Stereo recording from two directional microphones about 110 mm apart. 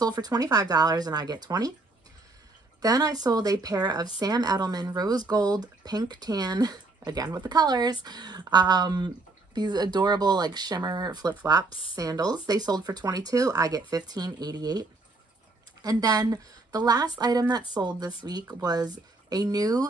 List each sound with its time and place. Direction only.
0.0 s speech: 35° right (ahead or behind)
2.8 s speech: 35° right (ahead or behind)